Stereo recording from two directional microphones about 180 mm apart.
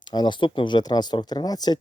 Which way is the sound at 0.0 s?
25° left (ahead or behind).